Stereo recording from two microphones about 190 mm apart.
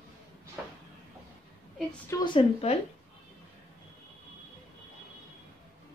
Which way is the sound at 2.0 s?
25° left (ahead or behind).